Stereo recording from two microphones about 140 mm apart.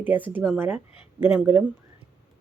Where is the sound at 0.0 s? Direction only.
15° right (ahead or behind).